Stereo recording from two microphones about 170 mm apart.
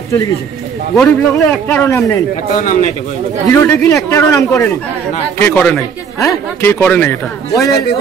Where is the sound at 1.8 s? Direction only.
20° left (ahead or behind).